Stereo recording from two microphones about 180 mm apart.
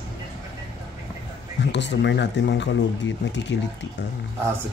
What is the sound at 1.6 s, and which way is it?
Speech, 75° left (ahead or behind).